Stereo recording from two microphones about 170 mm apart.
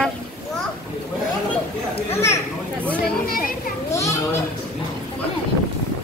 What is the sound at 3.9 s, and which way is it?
Children playing, 15° left (ahead or behind).